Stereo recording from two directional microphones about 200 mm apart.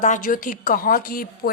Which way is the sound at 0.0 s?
40° left (ahead or behind).